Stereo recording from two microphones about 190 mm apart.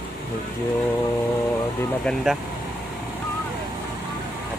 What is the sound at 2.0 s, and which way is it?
Speech, centre (ahead or behind).